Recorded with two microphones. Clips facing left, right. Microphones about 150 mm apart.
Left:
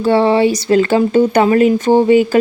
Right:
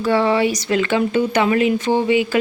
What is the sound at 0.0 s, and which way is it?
Speech, 30° left (ahead or behind).